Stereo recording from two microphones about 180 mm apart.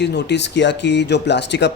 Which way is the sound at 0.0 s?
70° left (ahead or behind).